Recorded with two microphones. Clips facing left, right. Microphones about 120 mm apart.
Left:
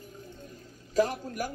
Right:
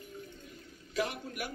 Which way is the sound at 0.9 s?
40° left (ahead or behind).